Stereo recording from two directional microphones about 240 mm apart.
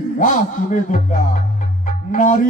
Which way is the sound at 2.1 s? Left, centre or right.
Left.